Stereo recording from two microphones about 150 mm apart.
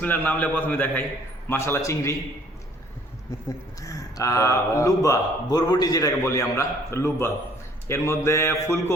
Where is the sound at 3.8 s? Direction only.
20° left (ahead or behind).